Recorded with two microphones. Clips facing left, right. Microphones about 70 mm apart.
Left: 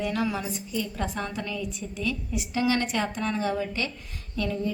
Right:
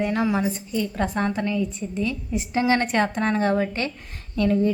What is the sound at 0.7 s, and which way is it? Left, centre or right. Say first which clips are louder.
A woman's voice: right 5 dB; right.